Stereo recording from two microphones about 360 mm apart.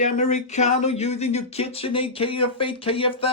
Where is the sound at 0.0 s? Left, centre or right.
Centre.